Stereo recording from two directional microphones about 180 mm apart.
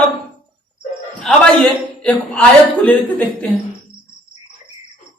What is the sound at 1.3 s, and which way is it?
Speech, centre (ahead or behind).